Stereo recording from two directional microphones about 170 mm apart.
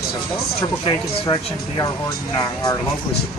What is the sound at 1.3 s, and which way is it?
Speech, 30° left (ahead or behind).